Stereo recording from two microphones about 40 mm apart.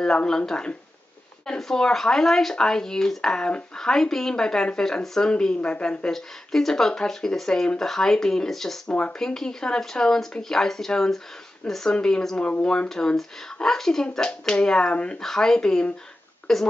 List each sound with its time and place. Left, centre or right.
1.6 s speech: centre
5.0 s speech: centre
5.3 s a child's voice: left
6.1 s speech: centre
12.4 s a child's voice: left
15.2 s speech: centre